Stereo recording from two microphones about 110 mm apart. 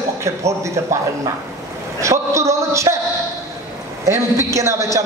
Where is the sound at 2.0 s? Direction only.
25° right (ahead or behind).